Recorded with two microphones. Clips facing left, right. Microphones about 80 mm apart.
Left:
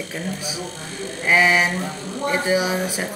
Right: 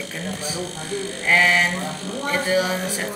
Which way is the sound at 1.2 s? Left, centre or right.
Centre.